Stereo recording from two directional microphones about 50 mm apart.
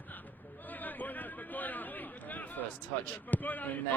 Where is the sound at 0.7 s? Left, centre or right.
Left.